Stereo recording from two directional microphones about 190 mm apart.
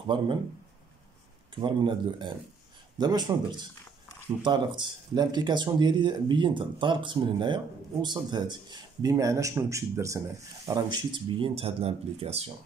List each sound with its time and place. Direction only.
0.0 s speech: 25° right (ahead or behind)
1.5 s speech: 25° right (ahead or behind)